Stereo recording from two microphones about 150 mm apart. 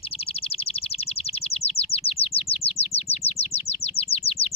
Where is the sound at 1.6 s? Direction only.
40° left (ahead or behind).